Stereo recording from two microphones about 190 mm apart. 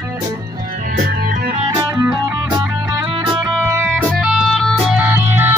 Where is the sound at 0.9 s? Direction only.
55° right (ahead or behind).